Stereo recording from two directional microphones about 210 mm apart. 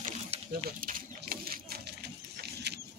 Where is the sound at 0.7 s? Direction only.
40° right (ahead or behind).